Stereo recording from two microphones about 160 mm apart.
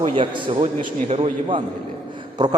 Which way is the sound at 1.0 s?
40° right (ahead or behind).